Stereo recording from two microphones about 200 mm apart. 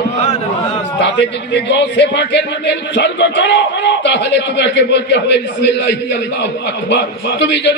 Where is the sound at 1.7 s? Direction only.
60° left (ahead or behind).